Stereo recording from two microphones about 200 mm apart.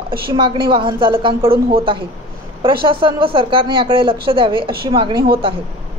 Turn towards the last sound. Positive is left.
turn(degrees=-25)  # may be behind; listen again after turning